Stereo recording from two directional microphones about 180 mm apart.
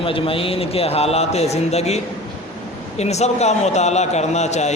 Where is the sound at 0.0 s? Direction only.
30° left (ahead or behind).